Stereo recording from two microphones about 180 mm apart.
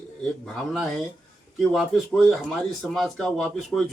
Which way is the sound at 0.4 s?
Centre (ahead or behind).